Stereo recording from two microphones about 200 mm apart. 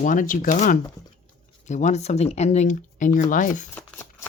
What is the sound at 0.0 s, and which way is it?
Speech, 40° left (ahead or behind).